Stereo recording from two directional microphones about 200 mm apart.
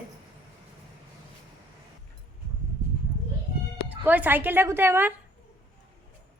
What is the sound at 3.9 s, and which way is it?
A woman's voice, 10° right (ahead or behind).